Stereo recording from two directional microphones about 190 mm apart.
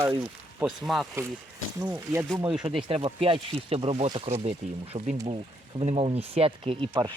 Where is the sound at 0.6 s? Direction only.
10° right (ahead or behind).